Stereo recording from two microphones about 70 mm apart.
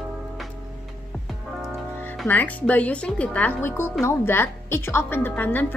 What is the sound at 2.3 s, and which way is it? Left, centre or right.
A woman's voice, left.